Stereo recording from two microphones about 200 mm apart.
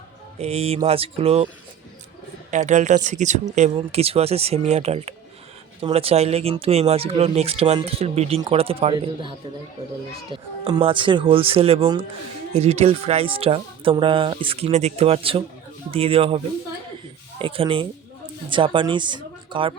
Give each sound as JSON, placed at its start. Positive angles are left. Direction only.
{"t": 0.3, "sound": "speech", "side_deg": -30}
{"t": 2.5, "sound": "speech", "side_deg": -35}
{"t": 17.4, "sound": "speech", "side_deg": -25}